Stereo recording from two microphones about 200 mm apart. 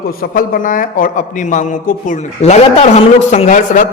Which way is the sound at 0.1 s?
45° left (ahead or behind).